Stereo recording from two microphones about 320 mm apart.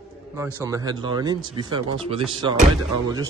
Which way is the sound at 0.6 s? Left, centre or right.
Centre.